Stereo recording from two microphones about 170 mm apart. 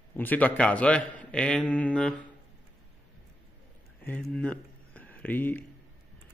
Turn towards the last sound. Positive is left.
turn(degrees=10)  # may be behind; listen again after turning